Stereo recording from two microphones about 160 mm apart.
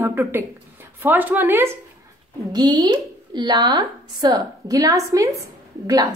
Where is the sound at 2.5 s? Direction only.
25° right (ahead or behind).